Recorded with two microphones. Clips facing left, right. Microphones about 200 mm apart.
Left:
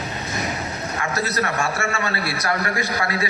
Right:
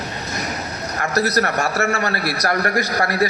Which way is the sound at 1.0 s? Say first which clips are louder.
Right 5 dB; 40° right (ahead or behind).